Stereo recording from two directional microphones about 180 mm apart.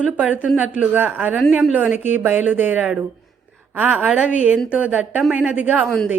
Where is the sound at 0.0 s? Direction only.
10° right (ahead or behind).